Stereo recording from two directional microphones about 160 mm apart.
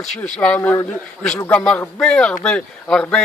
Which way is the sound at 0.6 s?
15° left (ahead or behind).